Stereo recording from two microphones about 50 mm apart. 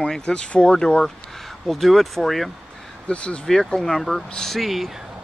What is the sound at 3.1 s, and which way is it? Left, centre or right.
Speech, left.